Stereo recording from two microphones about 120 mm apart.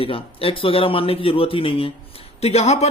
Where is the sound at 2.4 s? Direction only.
60° left (ahead or behind).